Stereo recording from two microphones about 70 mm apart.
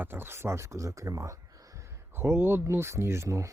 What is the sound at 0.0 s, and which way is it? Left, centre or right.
Speech, right.